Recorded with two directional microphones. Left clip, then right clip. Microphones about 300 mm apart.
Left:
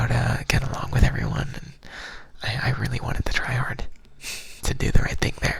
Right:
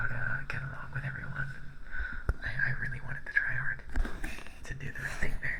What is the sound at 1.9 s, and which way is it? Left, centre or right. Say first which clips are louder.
Whispering: left 1 dB; left.